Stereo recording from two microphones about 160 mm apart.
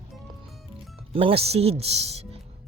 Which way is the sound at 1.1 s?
35° right (ahead or behind).